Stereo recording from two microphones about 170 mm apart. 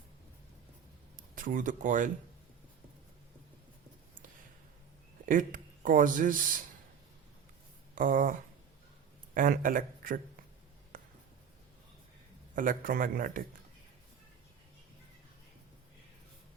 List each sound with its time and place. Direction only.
1.4 s a man's voice: 50° right (ahead or behind)
5.2 s speech: 50° right (ahead or behind)
7.9 s a man's voice: 50° right (ahead or behind)
10.9 s writing: 55° right (ahead or behind)
12.5 s a man's voice: 55° right (ahead or behind)